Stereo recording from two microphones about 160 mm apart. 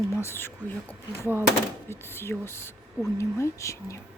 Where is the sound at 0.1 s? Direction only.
15° left (ahead or behind).